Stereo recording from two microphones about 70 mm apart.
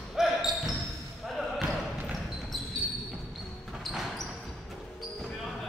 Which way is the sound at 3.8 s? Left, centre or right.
Centre.